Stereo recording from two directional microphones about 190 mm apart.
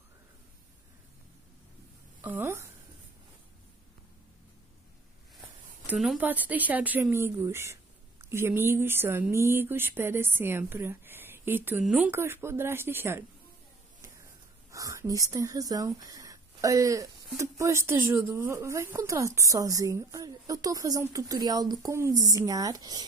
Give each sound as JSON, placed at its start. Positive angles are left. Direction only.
{"t": 2.2, "sound": "speech", "side_deg": -10}
{"t": 5.9, "sound": "speech", "side_deg": -5}
{"t": 14.7, "sound": "speech", "side_deg": -15}